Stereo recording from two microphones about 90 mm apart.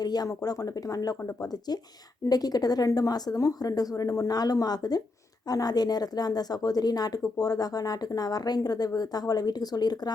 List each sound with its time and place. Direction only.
0.0 s a woman's voice: 50° left (ahead or behind)